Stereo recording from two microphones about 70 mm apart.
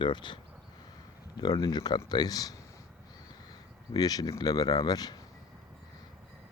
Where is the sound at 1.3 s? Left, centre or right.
Left.